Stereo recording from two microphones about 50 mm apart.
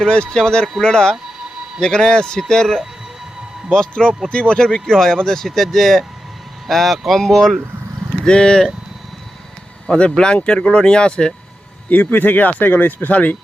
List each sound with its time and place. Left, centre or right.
0.0 s speech: centre
3.7 s speech: centre
4.6 s speech: centre
8.2 s speech: centre
9.8 s speech: centre
11.9 s speech: left